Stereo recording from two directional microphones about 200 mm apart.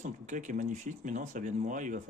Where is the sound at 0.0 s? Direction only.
40° right (ahead or behind).